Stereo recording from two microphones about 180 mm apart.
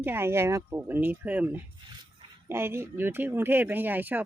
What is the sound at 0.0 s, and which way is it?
Speech, 10° right (ahead or behind).